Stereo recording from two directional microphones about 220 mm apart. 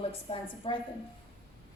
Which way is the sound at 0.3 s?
25° left (ahead or behind).